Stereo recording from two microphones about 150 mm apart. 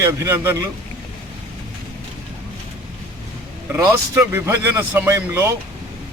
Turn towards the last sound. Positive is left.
turn(degrees=-15)  # may be behind; listen again after turning